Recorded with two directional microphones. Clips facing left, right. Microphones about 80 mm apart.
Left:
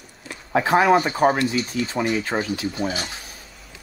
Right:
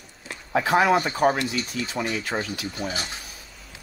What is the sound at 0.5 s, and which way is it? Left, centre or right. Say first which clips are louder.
Speech: left 3 dB; left.